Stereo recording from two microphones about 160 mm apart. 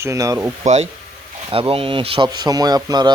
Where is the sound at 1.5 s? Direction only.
35° right (ahead or behind).